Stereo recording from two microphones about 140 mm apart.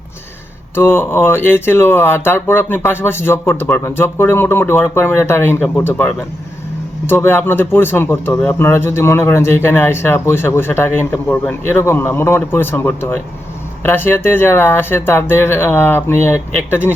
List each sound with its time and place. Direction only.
0.8 s speech: 15° left (ahead or behind)